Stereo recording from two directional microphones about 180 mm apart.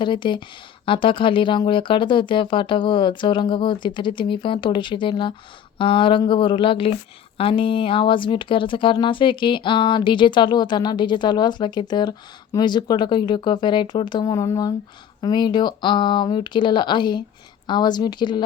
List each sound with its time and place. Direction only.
0.0 s speech: 25° left (ahead or behind)